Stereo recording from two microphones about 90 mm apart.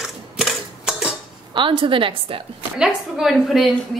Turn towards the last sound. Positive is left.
turn(degrees=0)  # may be behind; listen again after turning